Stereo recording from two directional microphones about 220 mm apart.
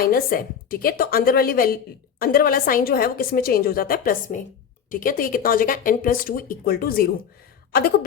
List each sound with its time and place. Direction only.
0.0 s speech: 40° left (ahead or behind)